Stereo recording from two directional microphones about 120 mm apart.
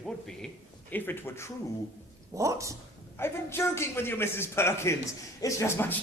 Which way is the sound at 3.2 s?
20° left (ahead or behind).